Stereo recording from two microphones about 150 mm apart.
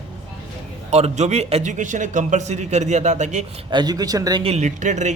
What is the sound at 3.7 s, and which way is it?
Speech, 30° right (ahead or behind).